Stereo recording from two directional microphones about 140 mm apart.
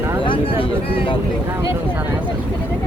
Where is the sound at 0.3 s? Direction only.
40° left (ahead or behind).